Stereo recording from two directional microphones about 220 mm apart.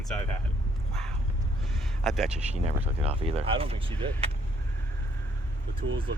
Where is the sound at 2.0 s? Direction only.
Centre (ahead or behind).